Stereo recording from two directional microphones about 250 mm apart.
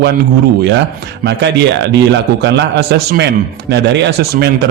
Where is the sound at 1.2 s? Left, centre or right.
Right.